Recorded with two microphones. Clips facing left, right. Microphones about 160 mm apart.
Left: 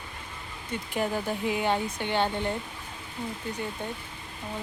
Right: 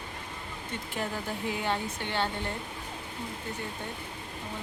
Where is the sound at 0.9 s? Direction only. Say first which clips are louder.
Left 6 dB; 15° left (ahead or behind).